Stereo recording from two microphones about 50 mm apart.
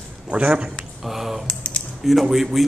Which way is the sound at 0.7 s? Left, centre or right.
Centre.